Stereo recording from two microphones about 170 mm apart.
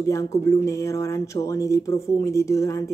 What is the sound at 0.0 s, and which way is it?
Speech, 20° left (ahead or behind).